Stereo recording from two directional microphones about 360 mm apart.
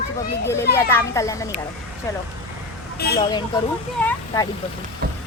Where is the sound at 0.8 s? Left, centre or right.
Centre.